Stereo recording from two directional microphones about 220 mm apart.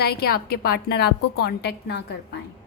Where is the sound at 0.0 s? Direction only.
45° left (ahead or behind).